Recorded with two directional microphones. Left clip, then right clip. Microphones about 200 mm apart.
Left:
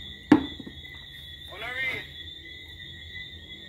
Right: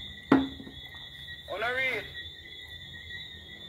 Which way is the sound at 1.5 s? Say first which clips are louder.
Right 2 dB; 45° right (ahead or behind).